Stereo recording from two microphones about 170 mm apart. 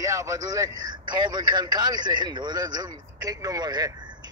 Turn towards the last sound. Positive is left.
turn(degrees=-25)  # may be behind; listen again after turning